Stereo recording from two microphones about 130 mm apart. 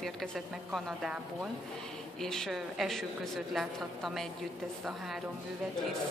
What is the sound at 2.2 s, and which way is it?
A woman's voice, 5° left (ahead or behind).